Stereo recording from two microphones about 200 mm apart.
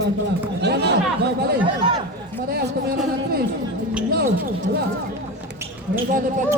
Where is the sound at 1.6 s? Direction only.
20° right (ahead or behind).